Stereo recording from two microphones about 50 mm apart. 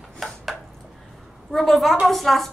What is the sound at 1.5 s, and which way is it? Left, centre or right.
Speech, centre.